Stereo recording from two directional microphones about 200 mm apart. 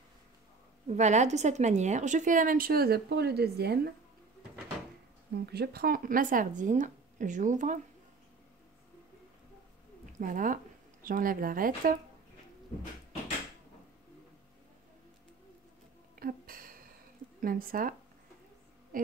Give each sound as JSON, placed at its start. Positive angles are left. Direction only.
{"t": 0.8, "sound": "a woman's voice", "side_deg": -35}
{"t": 5.4, "sound": "a woman's voice", "side_deg": -55}
{"t": 10.2, "sound": "speech", "side_deg": -40}
{"t": 16.2, "sound": "a sound", "side_deg": -45}
{"t": 17.4, "sound": "speech", "side_deg": -45}